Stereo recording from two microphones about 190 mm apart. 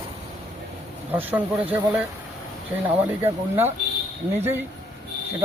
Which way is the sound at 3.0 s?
10° right (ahead or behind).